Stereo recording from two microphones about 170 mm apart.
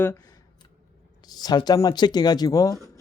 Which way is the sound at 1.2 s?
25° left (ahead or behind).